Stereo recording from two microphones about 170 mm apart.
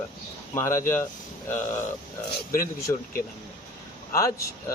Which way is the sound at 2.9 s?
15° left (ahead or behind).